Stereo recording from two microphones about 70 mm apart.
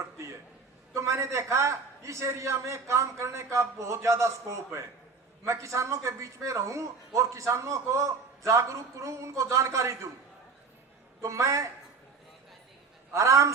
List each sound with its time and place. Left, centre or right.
0.9 s speech: right
11.2 s speech: right
13.1 s speech: right